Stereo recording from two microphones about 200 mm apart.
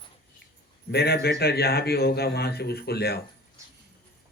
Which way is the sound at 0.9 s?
50° left (ahead or behind).